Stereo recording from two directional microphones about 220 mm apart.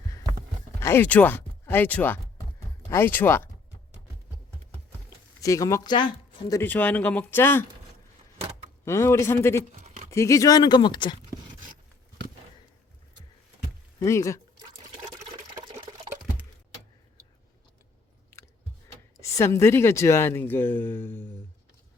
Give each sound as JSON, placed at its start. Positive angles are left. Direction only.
{"t": 0.8, "sound": "speech", "side_deg": 10}
{"t": 5.4, "sound": "speech", "side_deg": 15}
{"t": 6.6, "sound": "speech", "side_deg": 5}
{"t": 8.8, "sound": "speech", "side_deg": 10}
{"t": 14.0, "sound": "speech", "side_deg": 15}
{"t": 19.3, "sound": "speech", "side_deg": 15}